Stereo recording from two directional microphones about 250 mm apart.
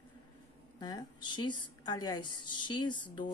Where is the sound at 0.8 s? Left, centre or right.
Centre.